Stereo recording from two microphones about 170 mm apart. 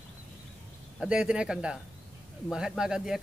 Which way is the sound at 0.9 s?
5° right (ahead or behind).